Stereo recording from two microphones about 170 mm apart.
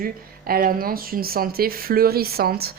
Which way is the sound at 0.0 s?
60° right (ahead or behind).